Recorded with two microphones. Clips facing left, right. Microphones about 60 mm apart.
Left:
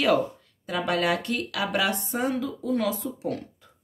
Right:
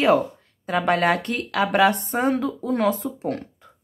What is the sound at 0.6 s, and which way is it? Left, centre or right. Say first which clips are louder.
Speech: right 5 dB; right.